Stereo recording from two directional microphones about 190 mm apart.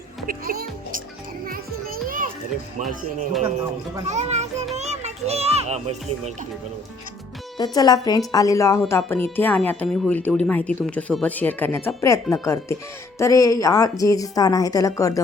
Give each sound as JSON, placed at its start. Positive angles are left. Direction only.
{"t": 0.3, "sound": "music", "side_deg": -50}
{"t": 2.0, "sound": "children playing", "side_deg": -45}
{"t": 4.0, "sound": "a child's voice", "side_deg": -35}
{"t": 7.6, "sound": "speech", "side_deg": 20}